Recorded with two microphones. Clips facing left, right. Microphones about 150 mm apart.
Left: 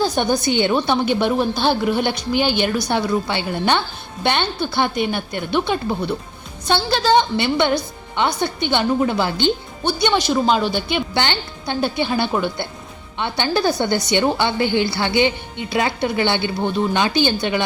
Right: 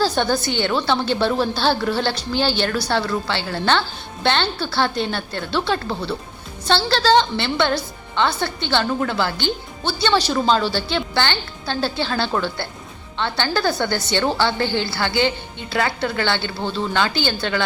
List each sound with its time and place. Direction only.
0.0 s a woman's voice: 15° left (ahead or behind)